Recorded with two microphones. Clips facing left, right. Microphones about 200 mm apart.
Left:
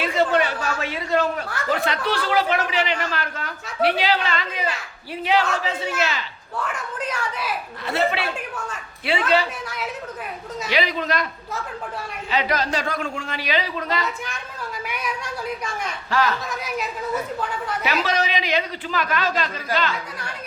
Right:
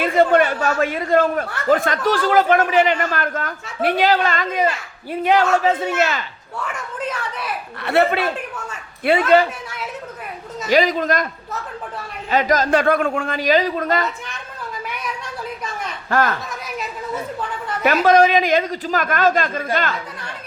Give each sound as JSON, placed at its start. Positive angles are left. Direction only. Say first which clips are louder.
{"t": 0.0, "sound": "speech", "louder": "right 5 dB", "side_deg": -50}
{"t": 7.1, "sound": "a woman's voice", "louder": "even", "side_deg": 0}
{"t": 7.8, "sound": "speech", "louder": "right 6 dB", "side_deg": -65}
{"t": 10.7, "sound": "speech", "louder": "right 7 dB", "side_deg": -45}
{"t": 12.3, "sound": "speech", "louder": "right 6 dB", "side_deg": -45}
{"t": 16.0, "sound": "speech", "louder": "right 3 dB", "side_deg": -50}
{"t": 17.8, "sound": "speech", "louder": "right 11 dB", "side_deg": -50}